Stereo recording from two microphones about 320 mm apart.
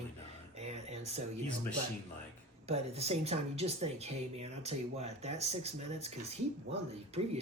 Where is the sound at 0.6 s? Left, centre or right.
Centre.